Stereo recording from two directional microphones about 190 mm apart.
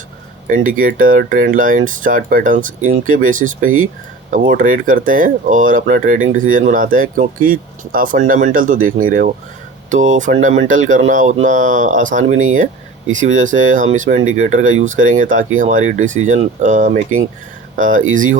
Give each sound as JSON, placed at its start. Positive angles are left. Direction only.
{"t": 0.4, "sound": "speech", "side_deg": -45}